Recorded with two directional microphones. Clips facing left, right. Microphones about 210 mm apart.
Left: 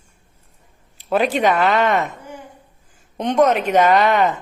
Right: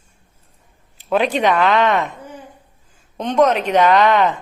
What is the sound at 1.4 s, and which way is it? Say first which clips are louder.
Speech: right 1 dB; 10° left (ahead or behind).